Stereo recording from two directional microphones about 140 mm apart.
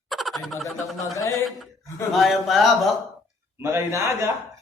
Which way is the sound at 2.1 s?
Centre (ahead or behind).